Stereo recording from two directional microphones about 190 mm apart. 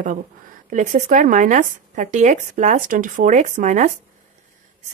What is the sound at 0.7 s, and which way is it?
Speech, 40° right (ahead or behind).